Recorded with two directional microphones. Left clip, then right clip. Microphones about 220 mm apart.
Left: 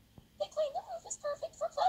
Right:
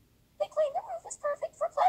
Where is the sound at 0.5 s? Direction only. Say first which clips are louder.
Right 6 dB; 5° right (ahead or behind).